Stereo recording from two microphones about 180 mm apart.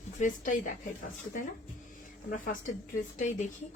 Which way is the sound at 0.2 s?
45° left (ahead or behind).